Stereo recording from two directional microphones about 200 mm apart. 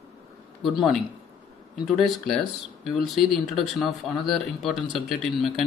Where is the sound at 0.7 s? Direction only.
Centre (ahead or behind).